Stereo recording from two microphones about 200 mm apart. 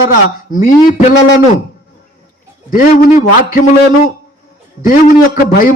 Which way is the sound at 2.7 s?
40° left (ahead or behind).